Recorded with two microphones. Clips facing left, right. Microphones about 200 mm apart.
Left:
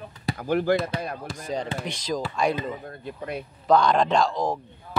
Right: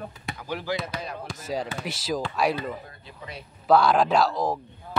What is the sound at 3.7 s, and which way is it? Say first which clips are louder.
Speech: even; 5° right (ahead or behind).